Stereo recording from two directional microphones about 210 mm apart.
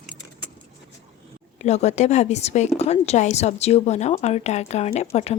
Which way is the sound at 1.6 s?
30° left (ahead or behind).